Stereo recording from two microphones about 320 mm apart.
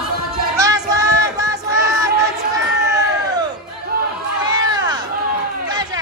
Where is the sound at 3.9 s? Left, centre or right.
Right.